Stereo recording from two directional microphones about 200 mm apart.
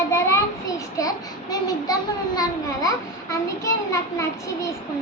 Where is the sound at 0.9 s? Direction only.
20° left (ahead or behind).